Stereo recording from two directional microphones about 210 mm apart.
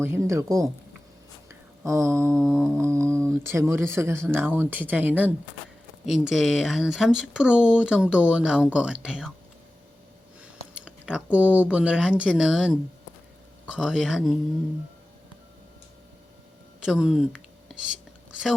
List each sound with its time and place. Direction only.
0.0 s speech: 10° right (ahead or behind)
1.8 s speech: 15° right (ahead or behind)
2.4 s speech: 5° left (ahead or behind)
2.7 s speech: 15° right (ahead or behind)
10.4 s speech: 5° right (ahead or behind)
16.8 s a sound: 5° right (ahead or behind)